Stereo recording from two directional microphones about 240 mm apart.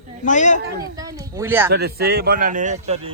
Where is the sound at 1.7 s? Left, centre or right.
Right.